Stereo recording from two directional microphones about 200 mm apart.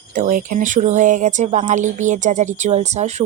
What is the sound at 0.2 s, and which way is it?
Speech, 40° right (ahead or behind).